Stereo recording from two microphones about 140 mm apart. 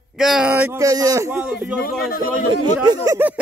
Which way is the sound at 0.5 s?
15° right (ahead or behind).